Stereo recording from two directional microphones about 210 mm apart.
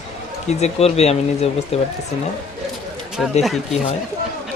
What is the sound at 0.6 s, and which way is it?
Speech, 30° left (ahead or behind).